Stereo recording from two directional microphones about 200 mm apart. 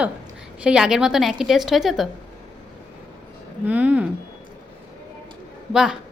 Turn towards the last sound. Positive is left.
turn(degrees=0)  # may be behind; listen again after turning